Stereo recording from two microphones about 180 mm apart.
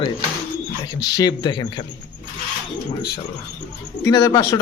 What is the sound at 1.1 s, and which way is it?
Speech, 20° left (ahead or behind).